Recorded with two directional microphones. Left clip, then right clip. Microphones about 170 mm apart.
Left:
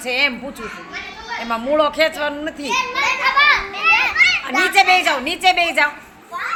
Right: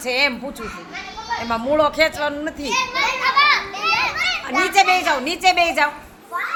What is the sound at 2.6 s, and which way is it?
Children playing, 55° left (ahead or behind).